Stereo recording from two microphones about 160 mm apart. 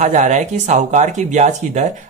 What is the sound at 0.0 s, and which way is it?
Speech, 50° right (ahead or behind).